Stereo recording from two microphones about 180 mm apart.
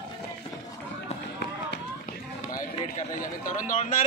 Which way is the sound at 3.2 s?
45° left (ahead or behind).